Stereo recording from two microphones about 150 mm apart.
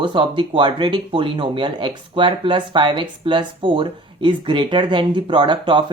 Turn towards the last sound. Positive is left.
turn(degrees=-35)  # may be behind; listen again after turning